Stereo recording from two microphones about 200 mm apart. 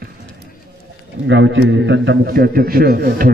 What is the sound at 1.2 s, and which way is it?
A man's voice, 65° right (ahead or behind).